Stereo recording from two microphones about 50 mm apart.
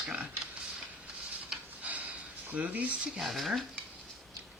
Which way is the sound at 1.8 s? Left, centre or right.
Right.